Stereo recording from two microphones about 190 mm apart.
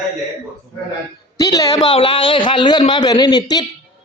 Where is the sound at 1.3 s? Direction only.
20° left (ahead or behind).